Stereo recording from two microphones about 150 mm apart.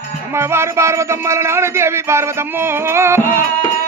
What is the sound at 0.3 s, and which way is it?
Music, 20° right (ahead or behind).